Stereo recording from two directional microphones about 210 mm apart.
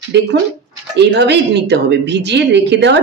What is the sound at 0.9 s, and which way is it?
A woman's voice, 55° right (ahead or behind).